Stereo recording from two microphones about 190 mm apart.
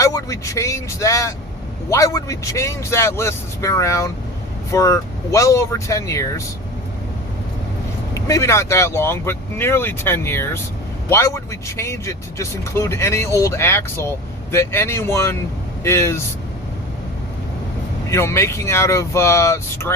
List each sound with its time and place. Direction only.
0.0 s speech: 15° left (ahead or behind)
8.1 s speech: 15° left (ahead or behind)
18.1 s speech: 15° left (ahead or behind)